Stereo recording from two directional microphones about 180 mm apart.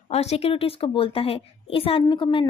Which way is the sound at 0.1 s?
35° left (ahead or behind).